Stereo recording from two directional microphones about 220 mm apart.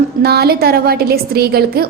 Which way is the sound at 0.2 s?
45° right (ahead or behind).